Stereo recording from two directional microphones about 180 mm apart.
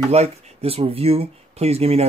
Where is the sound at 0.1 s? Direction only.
35° right (ahead or behind).